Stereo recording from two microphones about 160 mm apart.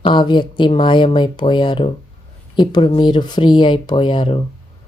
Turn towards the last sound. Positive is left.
turn(degrees=30)  # may be behind; listen again after turning